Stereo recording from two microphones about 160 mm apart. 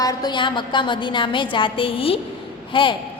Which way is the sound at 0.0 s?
25° left (ahead or behind).